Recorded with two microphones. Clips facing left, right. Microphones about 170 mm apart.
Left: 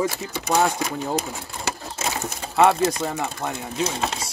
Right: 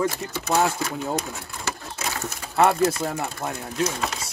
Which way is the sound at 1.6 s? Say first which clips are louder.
Left 3 dB; 25° left (ahead or behind).